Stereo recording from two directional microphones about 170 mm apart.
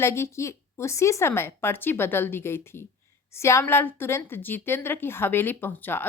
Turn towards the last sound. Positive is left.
turn(degrees=10)  # may be behind; listen again after turning